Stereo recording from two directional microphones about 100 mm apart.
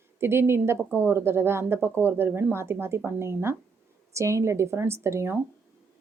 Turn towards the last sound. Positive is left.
turn(degrees=-25)  # may be behind; listen again after turning